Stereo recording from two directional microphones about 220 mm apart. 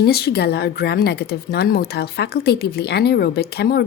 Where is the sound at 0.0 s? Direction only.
45° left (ahead or behind).